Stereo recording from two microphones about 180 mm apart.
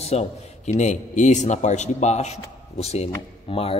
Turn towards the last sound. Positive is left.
turn(degrees=30)  # may be behind; listen again after turning